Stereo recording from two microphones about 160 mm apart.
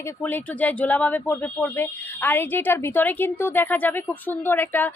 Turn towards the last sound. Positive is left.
turn(degrees=10)  # may be behind; listen again after turning